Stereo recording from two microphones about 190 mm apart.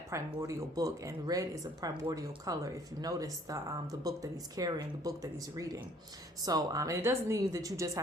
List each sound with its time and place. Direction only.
0.1 s speech: 15° right (ahead or behind)